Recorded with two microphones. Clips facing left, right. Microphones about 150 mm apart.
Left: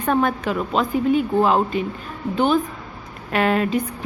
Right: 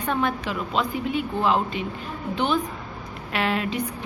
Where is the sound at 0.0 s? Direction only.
45° left (ahead or behind).